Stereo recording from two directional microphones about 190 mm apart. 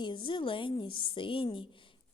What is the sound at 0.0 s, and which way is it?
A woman's voice, 25° left (ahead or behind).